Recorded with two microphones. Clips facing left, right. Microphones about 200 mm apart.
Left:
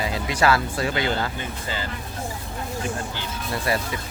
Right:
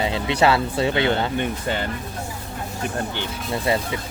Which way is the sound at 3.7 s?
25° right (ahead or behind).